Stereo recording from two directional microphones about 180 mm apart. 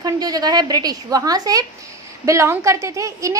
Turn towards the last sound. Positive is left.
turn(degrees=-15)  # may be behind; listen again after turning